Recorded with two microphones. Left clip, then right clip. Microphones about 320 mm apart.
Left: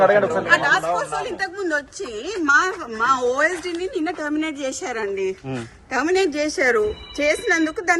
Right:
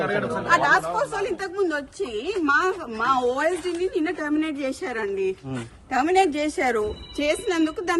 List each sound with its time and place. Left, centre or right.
0.0 s speech: centre
0.4 s speech: centre